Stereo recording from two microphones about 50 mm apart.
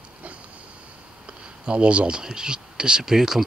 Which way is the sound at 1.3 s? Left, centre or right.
Centre.